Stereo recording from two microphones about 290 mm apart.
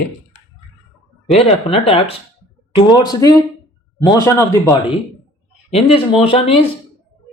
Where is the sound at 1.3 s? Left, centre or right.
Centre.